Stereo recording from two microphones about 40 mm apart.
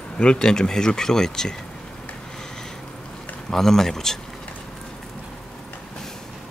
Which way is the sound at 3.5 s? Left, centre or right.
Centre.